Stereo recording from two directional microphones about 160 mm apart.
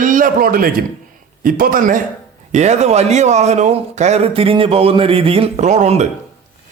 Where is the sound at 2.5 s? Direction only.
45° right (ahead or behind).